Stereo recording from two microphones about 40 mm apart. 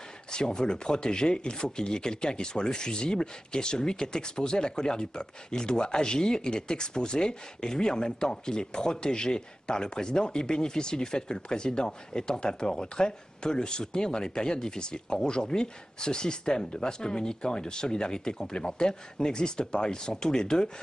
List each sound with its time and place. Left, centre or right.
0.3 s speech: centre